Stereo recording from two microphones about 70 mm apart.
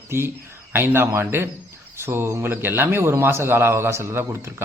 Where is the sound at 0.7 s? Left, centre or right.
Right.